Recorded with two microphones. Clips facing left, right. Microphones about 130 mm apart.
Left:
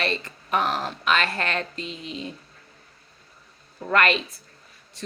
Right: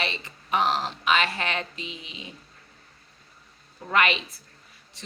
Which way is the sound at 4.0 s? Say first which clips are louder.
Left 2 dB; 50° left (ahead or behind).